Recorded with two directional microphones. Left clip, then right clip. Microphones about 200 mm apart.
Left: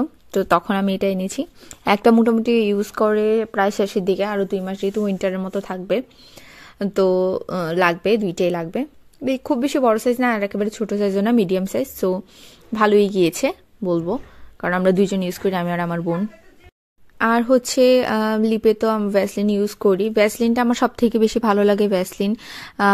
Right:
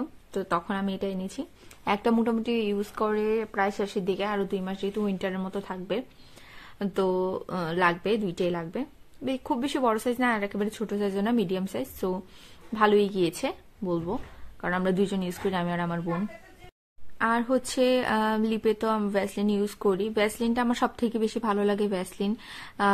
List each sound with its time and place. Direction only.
0.0 s a woman's voice: 40° left (ahead or behind)
17.2 s a woman's voice: 35° left (ahead or behind)